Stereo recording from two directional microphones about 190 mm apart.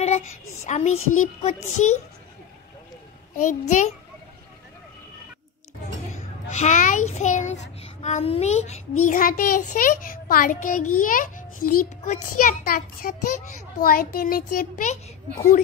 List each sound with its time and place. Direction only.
0.7 s music: 35° left (ahead or behind)
0.9 s a child's voice: 90° left
1.2 s music: 35° left (ahead or behind)
3.3 s music: 40° left (ahead or behind)
6.1 s a sound: 40° left (ahead or behind)
7.2 s music: 40° left (ahead or behind)
7.8 s a child's voice: 35° left (ahead or behind)